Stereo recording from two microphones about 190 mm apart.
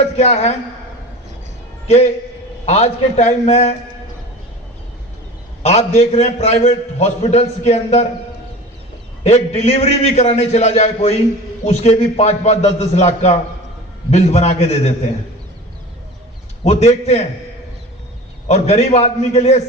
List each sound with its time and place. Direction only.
0.0 s a man's voice: 35° left (ahead or behind)
2.6 s a man's voice: 35° left (ahead or behind)
5.6 s a man's voice: 35° left (ahead or behind)
9.2 s a man's voice: 35° left (ahead or behind)
16.6 s a man's voice: 35° left (ahead or behind)
18.4 s a man's voice: 35° left (ahead or behind)